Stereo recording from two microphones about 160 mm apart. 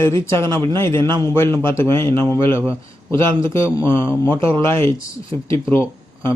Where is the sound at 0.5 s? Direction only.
25° right (ahead or behind).